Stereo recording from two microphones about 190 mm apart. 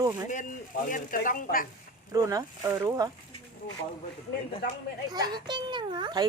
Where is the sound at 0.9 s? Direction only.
45° left (ahead or behind).